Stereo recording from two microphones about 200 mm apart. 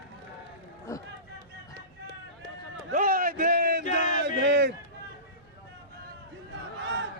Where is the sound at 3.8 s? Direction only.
40° left (ahead or behind).